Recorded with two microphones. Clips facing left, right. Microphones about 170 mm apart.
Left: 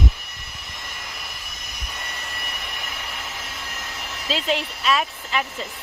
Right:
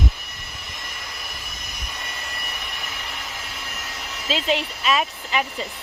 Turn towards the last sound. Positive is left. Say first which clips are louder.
# right 1 dB
turn(degrees=-5)  # may be behind; listen again after turning